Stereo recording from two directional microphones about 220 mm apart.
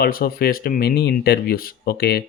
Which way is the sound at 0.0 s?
40° left (ahead or behind).